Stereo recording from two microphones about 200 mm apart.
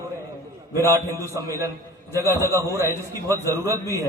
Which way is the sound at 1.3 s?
15° right (ahead or behind).